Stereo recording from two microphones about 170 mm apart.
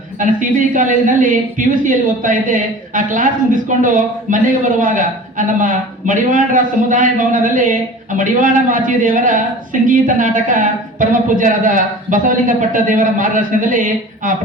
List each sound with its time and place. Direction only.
0.2 s a woman's voice: 50° right (ahead or behind)